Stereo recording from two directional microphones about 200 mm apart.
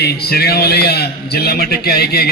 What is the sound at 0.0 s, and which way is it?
A man's voice, 50° left (ahead or behind).